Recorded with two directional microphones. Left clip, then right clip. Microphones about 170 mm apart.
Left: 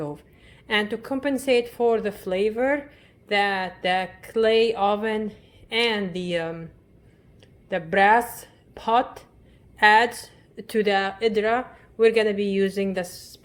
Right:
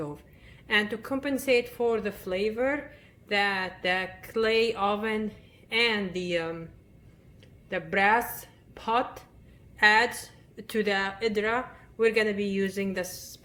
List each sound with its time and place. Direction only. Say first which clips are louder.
0.0 s speech: left 4 dB; 30° left (ahead or behind)
7.7 s a woman's voice: left 6 dB; 35° left (ahead or behind)